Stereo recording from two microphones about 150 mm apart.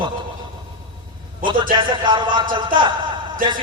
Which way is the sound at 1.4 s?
35° right (ahead or behind).